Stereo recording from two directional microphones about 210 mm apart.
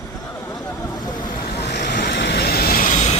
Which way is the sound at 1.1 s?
20° left (ahead or behind).